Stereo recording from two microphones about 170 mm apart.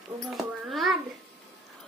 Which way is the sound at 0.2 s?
Centre (ahead or behind).